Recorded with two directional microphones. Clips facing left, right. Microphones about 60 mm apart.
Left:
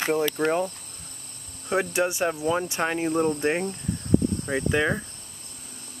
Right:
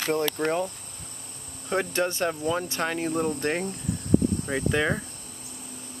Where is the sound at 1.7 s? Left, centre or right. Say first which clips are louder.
Left 2 dB; centre.